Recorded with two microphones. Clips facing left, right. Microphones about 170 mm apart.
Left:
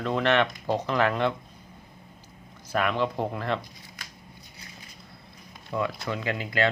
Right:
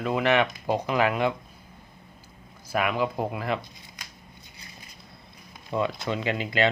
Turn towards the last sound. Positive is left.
turn(degrees=-20)  # may be behind; listen again after turning